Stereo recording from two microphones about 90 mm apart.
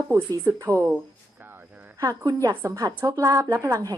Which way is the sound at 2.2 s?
40° right (ahead or behind).